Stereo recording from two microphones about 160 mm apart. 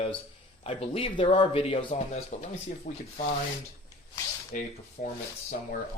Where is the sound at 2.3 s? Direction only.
50° left (ahead or behind).